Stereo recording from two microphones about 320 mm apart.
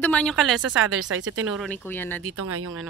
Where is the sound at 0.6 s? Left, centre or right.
Right.